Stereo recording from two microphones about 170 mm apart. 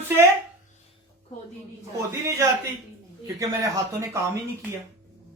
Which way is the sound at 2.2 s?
15° right (ahead or behind).